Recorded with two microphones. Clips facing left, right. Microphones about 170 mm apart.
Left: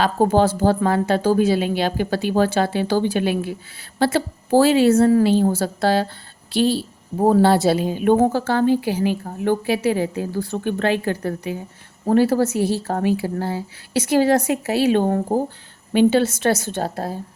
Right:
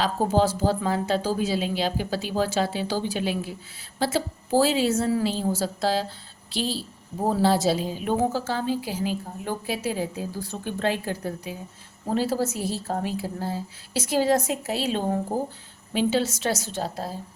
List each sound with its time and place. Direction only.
0.0 s a woman's voice: 60° left (ahead or behind)